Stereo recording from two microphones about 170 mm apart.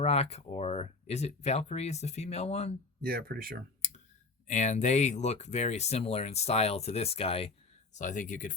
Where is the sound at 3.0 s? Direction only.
60° right (ahead or behind).